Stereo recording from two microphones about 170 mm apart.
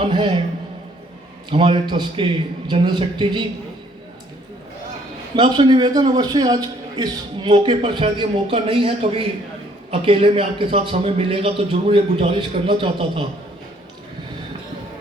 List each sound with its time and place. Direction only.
0.0 s a man's voice: 30° right (ahead or behind)
1.5 s a man's voice: 30° right (ahead or behind)
5.4 s a man's voice: 25° right (ahead or behind)